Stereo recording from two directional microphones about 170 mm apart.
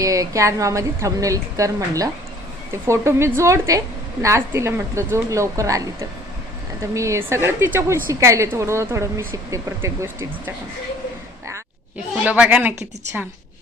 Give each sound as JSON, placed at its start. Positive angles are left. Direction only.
{"t": 0.0, "sound": "a woman's voice", "side_deg": -20}
{"t": 12.2, "sound": "a woman's voice", "side_deg": -10}